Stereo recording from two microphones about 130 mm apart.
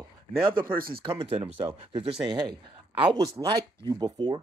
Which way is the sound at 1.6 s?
30° right (ahead or behind).